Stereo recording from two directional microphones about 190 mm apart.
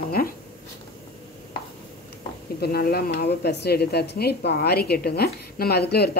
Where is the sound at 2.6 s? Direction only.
55° left (ahead or behind).